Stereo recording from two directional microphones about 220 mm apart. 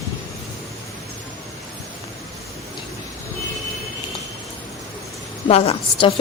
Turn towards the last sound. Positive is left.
turn(degrees=30)  # may be behind; listen again after turning